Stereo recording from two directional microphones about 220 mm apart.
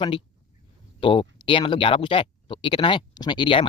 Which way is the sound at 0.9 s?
25° left (ahead or behind).